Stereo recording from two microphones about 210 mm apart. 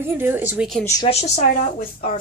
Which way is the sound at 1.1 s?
35° left (ahead or behind).